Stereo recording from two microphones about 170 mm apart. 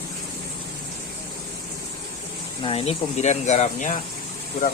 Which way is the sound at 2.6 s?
35° left (ahead or behind).